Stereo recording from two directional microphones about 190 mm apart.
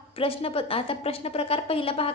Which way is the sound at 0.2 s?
30° left (ahead or behind).